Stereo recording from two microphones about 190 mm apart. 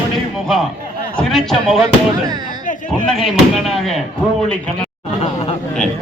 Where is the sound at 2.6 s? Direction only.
45° left (ahead or behind).